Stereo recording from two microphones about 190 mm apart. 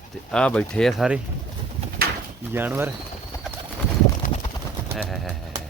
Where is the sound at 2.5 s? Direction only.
10° right (ahead or behind).